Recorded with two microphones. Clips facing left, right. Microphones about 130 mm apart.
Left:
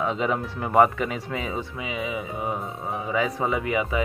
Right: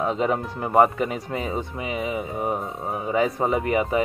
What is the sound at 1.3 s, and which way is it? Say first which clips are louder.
Speech: right 2 dB; 25° right (ahead or behind).